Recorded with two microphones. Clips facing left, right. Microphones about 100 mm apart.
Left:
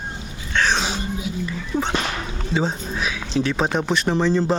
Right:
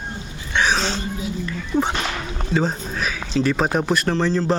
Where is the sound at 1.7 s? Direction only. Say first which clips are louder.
Right 3 dB; 10° left (ahead or behind).